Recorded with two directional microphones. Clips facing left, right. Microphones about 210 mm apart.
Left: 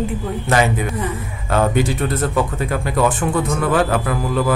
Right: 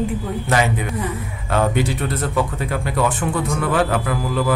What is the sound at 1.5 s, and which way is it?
Speech, 45° left (ahead or behind).